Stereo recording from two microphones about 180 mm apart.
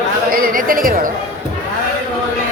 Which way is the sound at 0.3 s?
50° right (ahead or behind).